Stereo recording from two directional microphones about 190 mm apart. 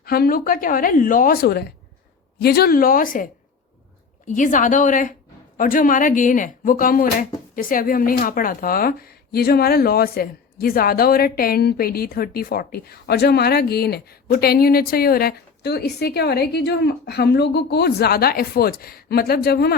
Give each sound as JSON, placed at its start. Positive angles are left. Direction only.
{"t": 0.0, "sound": "speech", "side_deg": 50}
{"t": 4.3, "sound": "speech", "side_deg": 45}